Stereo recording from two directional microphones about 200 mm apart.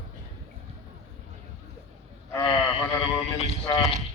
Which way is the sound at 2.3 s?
25° left (ahead or behind).